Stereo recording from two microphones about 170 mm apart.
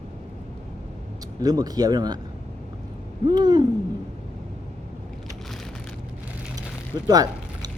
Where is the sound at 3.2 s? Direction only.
25° right (ahead or behind).